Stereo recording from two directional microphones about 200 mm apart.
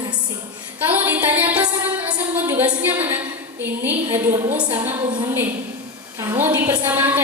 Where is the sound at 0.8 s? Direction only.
10° right (ahead or behind).